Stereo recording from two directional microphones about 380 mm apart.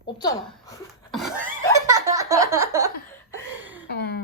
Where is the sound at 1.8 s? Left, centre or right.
Centre.